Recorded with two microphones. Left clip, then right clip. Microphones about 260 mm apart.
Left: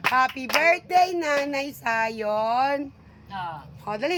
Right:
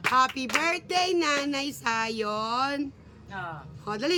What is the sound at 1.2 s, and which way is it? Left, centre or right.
Speech, centre.